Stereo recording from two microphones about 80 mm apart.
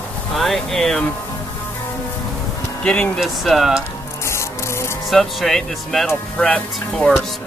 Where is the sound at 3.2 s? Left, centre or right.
Centre.